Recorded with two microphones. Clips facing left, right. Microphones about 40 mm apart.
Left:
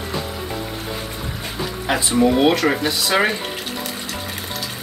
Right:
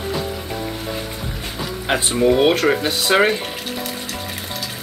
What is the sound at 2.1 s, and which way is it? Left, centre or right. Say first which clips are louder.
Speech: even; centre.